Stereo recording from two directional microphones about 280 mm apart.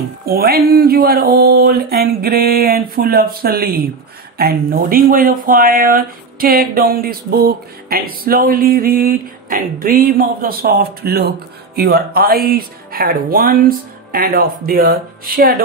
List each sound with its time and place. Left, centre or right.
0.2 s speech: right